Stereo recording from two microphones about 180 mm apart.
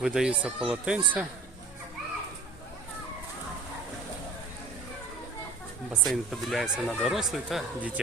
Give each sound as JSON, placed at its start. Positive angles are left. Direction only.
{"t": 0.0, "sound": "speech", "side_deg": -5}
{"t": 5.9, "sound": "speech", "side_deg": 0}